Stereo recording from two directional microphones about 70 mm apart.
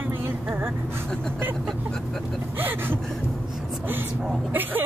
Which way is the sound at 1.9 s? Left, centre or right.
Centre.